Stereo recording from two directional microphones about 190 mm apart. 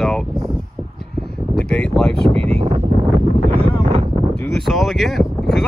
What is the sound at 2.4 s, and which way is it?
Speech, 35° right (ahead or behind).